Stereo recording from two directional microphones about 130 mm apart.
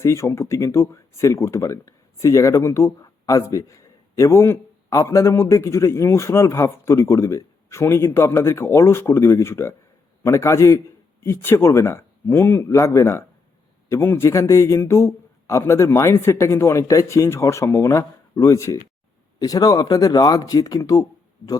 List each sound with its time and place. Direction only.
0.0 s speech: 20° left (ahead or behind)